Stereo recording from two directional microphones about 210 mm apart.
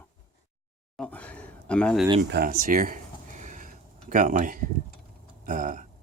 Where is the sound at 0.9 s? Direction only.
5° left (ahead or behind).